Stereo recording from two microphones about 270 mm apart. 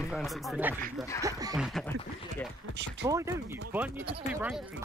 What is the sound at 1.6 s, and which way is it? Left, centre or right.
Speech, centre.